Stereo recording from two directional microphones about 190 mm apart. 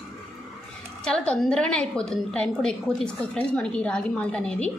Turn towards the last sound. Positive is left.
turn(degrees=5)  # may be behind; listen again after turning